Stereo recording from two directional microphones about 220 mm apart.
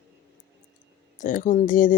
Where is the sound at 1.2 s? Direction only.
35° left (ahead or behind).